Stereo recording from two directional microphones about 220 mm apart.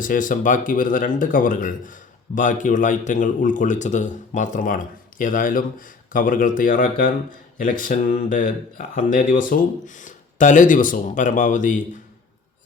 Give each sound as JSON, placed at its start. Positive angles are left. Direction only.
{"t": 0.0, "sound": "speech", "side_deg": 35}